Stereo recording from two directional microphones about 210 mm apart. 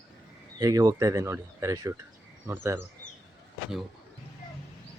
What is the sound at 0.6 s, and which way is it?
Speech, 15° right (ahead or behind).